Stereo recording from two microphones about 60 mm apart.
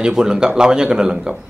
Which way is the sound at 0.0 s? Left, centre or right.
Centre.